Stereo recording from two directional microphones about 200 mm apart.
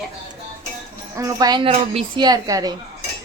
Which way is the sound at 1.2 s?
15° right (ahead or behind).